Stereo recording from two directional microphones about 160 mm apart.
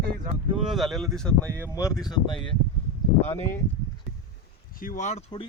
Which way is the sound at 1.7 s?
20° left (ahead or behind).